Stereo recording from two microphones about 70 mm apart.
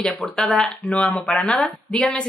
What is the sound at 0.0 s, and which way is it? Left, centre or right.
Speech, centre.